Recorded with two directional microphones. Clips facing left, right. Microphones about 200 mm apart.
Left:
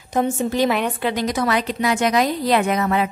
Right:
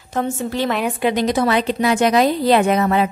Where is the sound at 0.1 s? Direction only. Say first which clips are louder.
Left 2 dB; 15° left (ahead or behind).